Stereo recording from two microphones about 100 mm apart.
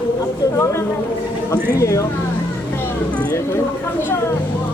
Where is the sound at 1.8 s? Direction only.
30° left (ahead or behind).